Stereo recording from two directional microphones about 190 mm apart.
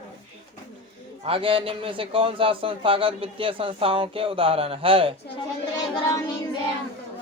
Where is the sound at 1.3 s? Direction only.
30° right (ahead or behind).